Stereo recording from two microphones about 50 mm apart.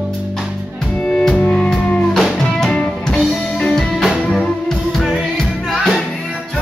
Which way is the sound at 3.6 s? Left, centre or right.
Centre.